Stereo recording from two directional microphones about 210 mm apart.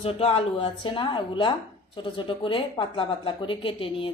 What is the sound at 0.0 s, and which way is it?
Speech, 25° left (ahead or behind).